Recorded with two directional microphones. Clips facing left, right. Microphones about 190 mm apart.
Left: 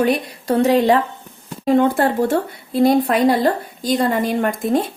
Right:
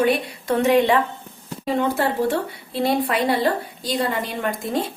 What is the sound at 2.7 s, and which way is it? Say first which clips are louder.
A woman's voice: left 6 dB; 45° left (ahead or behind).